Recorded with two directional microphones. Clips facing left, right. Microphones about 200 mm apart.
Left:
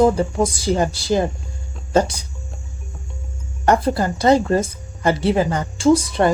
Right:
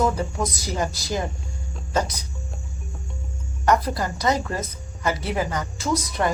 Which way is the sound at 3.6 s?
30° left (ahead or behind).